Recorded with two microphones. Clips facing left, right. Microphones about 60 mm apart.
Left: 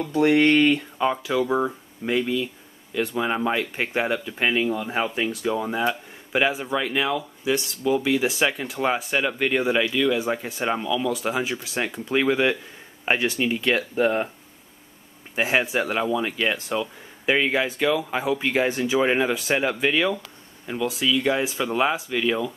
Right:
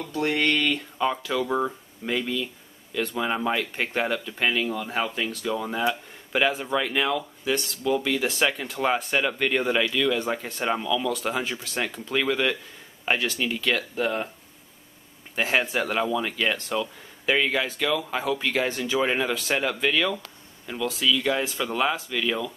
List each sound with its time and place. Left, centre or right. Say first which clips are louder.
0.0 s speech: left 6 dB; left
15.3 s speech: left 2 dB; centre